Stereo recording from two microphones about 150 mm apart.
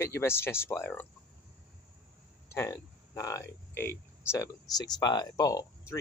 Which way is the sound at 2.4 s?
20° left (ahead or behind).